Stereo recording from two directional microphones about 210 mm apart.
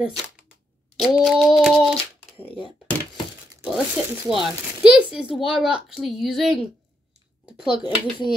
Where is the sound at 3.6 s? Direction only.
5° right (ahead or behind).